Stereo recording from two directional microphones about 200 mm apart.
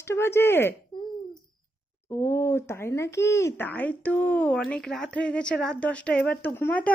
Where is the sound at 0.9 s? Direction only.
25° left (ahead or behind).